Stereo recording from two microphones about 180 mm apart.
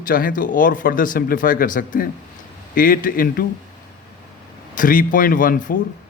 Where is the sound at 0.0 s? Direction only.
50° left (ahead or behind).